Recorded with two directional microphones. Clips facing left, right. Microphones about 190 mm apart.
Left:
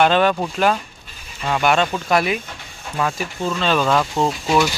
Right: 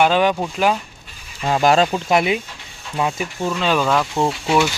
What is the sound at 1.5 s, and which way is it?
Speech, 30° right (ahead or behind).